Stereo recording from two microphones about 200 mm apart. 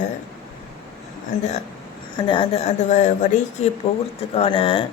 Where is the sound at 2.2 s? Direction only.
25° left (ahead or behind).